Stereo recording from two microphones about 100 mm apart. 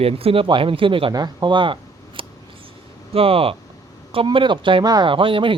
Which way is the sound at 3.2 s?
70° right (ahead or behind).